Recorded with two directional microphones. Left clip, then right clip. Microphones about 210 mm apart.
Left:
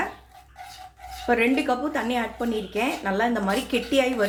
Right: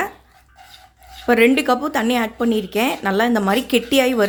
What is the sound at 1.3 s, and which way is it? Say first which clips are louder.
Speech: right 7 dB; 55° right (ahead or behind).